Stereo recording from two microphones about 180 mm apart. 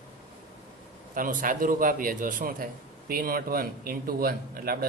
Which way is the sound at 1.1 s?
50° right (ahead or behind).